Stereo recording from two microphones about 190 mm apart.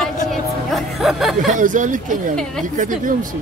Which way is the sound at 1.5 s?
40° right (ahead or behind).